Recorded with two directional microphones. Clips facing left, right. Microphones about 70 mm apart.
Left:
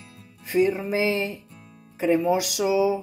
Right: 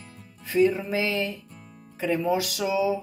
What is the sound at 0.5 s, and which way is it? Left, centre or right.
Speech, centre.